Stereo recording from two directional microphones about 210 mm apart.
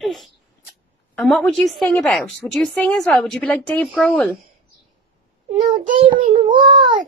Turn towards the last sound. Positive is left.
turn(degrees=-20)  # may be behind; listen again after turning